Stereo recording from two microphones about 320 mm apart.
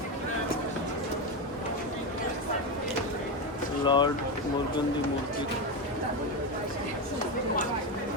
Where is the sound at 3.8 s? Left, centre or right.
Centre.